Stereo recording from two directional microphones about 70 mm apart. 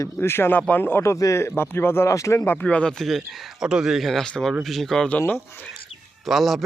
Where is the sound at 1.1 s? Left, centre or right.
Left.